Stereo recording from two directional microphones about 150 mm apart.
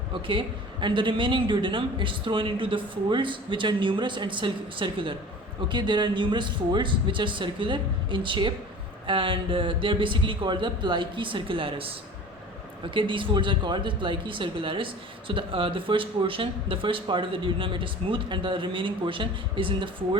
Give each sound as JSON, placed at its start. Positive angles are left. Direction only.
{"t": 0.1, "sound": "speech", "side_deg": -35}